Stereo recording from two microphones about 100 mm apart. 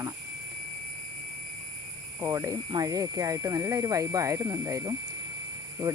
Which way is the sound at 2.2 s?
30° right (ahead or behind).